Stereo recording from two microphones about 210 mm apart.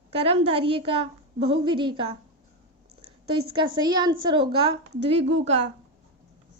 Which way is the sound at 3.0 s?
25° right (ahead or behind).